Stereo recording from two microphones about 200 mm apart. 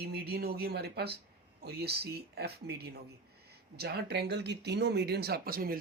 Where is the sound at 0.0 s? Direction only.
55° right (ahead or behind).